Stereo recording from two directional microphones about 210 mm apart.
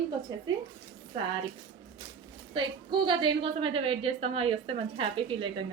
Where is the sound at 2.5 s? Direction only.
20° right (ahead or behind).